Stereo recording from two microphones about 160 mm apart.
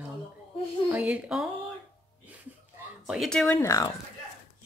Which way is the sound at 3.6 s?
20° left (ahead or behind).